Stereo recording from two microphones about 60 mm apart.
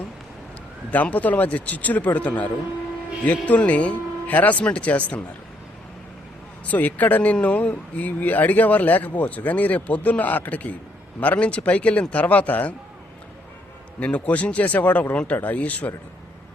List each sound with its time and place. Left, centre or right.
0.9 s speech: left
6.7 s speech: left
14.0 s speech: left